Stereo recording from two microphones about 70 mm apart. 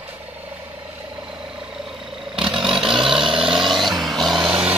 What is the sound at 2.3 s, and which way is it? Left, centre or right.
Vehicle, centre.